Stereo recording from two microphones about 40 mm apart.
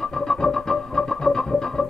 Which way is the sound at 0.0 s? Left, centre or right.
Centre.